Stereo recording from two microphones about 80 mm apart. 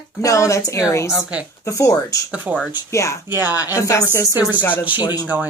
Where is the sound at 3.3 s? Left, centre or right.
Right.